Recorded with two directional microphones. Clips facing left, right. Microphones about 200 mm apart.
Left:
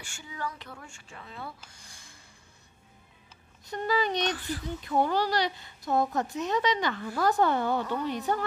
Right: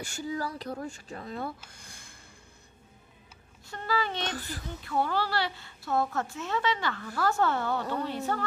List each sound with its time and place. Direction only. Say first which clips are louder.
0.0 s speech: right 5 dB; 40° right (ahead or behind); by 2.1 s 55° right (ahead or behind)
3.6 s speech: left 3 dB; 15° left (ahead or behind)